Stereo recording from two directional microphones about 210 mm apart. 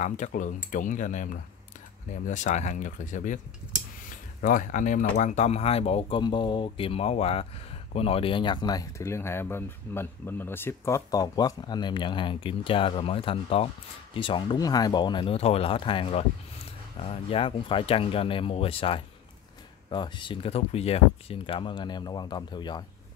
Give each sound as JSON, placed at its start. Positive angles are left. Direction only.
{"t": 0.0, "sound": "speech", "side_deg": 35}